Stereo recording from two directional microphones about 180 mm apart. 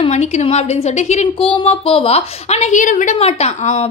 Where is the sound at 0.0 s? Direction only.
35° left (ahead or behind).